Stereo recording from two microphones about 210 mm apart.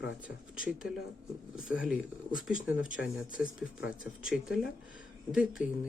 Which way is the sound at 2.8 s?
65° left (ahead or behind).